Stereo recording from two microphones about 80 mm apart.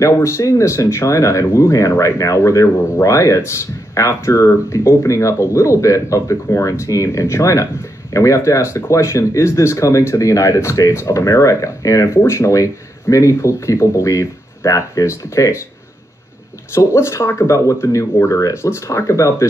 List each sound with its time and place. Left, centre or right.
0.0 s speech: left
16.7 s speech: left